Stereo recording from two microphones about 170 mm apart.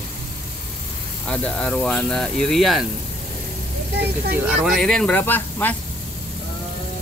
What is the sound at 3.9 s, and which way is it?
Speech, 75° right (ahead or behind).